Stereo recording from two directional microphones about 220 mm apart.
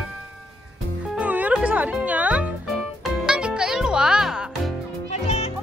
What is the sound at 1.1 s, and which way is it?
Music, 5° right (ahead or behind).